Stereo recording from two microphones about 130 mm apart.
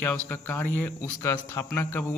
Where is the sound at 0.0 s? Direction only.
15° left (ahead or behind).